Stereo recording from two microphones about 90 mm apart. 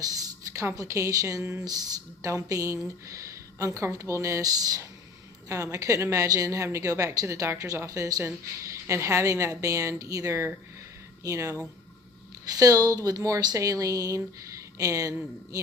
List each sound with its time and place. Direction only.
0.0 s a woman's voice: 40° right (ahead or behind)